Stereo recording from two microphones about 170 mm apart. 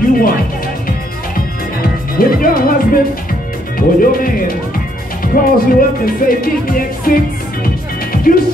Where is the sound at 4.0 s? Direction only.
55° left (ahead or behind).